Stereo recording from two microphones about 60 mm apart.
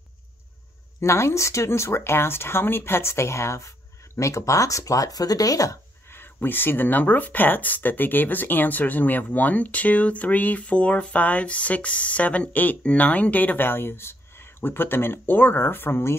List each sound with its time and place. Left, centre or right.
1.0 s speech: left
6.0 s speech: left